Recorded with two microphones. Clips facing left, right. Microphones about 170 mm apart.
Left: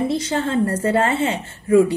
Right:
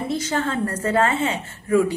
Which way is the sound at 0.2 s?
30° left (ahead or behind).